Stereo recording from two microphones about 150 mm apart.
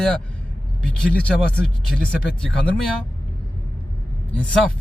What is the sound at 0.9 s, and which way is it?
Speech, 5° left (ahead or behind).